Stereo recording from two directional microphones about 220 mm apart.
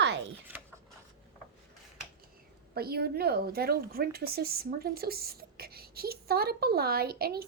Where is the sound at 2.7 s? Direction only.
45° right (ahead or behind).